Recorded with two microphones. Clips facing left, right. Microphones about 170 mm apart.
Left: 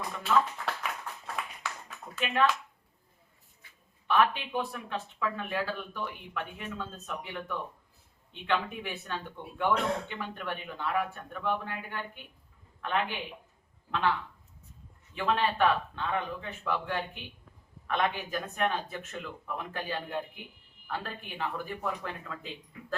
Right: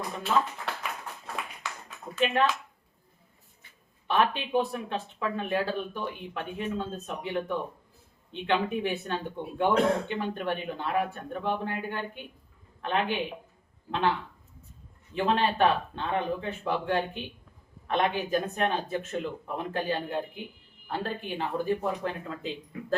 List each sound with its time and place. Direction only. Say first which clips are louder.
2.1 s speech: right 3 dB; 25° right (ahead or behind)
3.6 s speech: right 1 dB; 25° right (ahead or behind)